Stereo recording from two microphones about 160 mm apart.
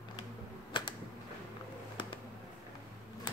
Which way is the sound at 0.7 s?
30° left (ahead or behind).